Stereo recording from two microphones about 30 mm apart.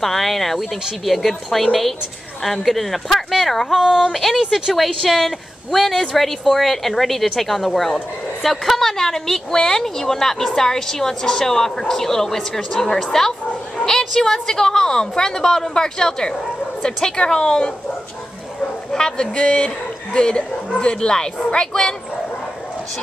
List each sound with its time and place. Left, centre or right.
0.0 s a woman's voice: centre
4.4 s speech: centre
4.7 s a woman's voice: centre; by 17.7 s left
18.9 s speech: left
19.3 s speech: left
20.2 s a woman's voice: left